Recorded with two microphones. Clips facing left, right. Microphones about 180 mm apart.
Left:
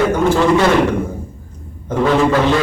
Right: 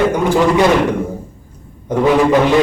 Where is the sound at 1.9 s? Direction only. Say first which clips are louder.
Right 2 dB; 15° right (ahead or behind).